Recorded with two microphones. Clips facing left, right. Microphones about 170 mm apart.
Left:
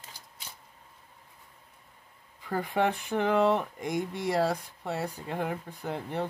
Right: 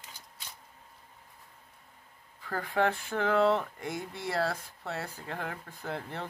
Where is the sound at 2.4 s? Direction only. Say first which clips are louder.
Left 1 dB; 15° left (ahead or behind).